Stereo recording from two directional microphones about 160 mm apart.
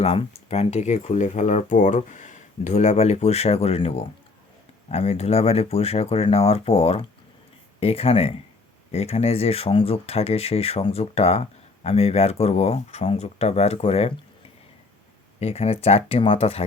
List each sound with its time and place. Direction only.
0.0 s speech: 40° left (ahead or behind)
15.4 s speech: 40° left (ahead or behind)